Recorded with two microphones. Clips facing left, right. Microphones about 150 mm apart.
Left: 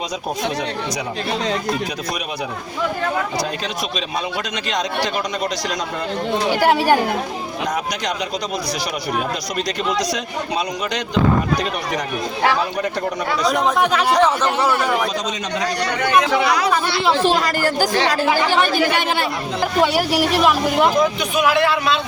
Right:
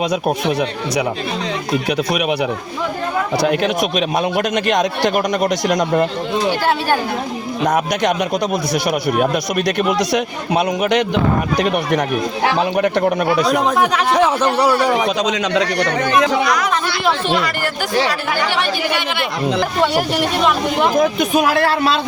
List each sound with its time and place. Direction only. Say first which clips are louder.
3.4 s a man's voice: right 9 dB; 65° right (ahead or behind)
6.6 s speech: left 2 dB; 15° left (ahead or behind)
7.7 s speech: right 8 dB; 55° right (ahead or behind)
13.4 s a man's voice: left 2 dB; centre (ahead or behind)
15.0 s a man's voice: right 6 dB; 70° right (ahead or behind)
16.4 s speech: even; 30° left (ahead or behind); by 19.2 s 45° left (ahead or behind)
19.8 s a man's voice: left 2 dB; 5° left (ahead or behind)
20.9 s speech: right 3 dB; 50° right (ahead or behind)